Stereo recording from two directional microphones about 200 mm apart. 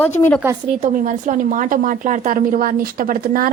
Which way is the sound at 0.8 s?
40° right (ahead or behind).